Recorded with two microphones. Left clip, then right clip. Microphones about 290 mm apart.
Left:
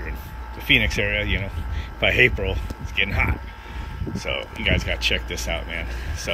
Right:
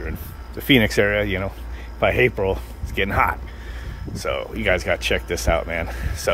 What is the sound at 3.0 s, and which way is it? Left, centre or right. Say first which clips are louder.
Speech: left 1 dB; right.